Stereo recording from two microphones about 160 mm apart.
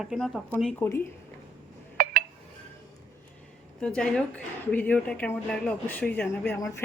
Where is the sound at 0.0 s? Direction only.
5° right (ahead or behind).